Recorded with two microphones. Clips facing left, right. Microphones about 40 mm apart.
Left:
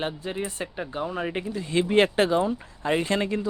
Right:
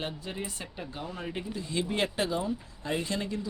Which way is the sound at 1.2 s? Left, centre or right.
Left.